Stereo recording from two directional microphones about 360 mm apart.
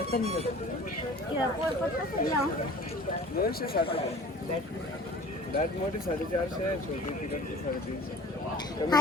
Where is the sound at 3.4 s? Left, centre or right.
Left.